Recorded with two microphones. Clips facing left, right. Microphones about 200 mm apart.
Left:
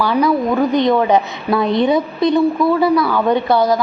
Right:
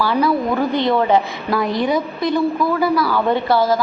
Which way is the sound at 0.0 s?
15° left (ahead or behind).